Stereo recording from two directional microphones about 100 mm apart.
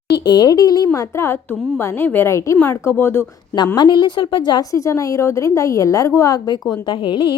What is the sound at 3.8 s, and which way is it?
Speech, 45° left (ahead or behind).